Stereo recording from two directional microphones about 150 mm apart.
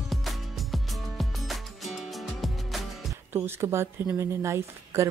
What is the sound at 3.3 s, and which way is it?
A woman's voice, 15° right (ahead or behind).